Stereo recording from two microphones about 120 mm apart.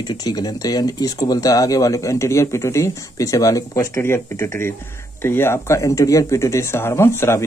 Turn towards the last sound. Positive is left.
turn(degrees=20)  # may be behind; listen again after turning